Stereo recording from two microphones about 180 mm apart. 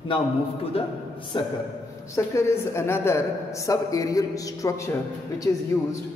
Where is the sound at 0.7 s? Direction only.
30° left (ahead or behind).